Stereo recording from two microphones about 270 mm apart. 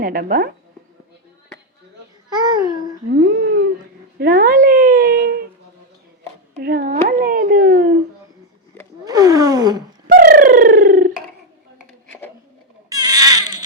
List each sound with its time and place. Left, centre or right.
0.0 s speech: right
2.3 s speech: centre
3.1 s a sound: right
6.6 s speech: right
9.0 s gasp: centre
10.1 s bird: right
11.9 s a sound: centre
12.9 s baby cry: centre